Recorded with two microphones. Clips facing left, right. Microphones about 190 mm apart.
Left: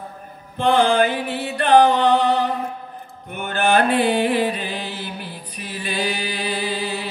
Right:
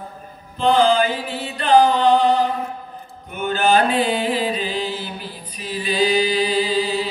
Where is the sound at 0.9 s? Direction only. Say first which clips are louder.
Even; 60° left (ahead or behind).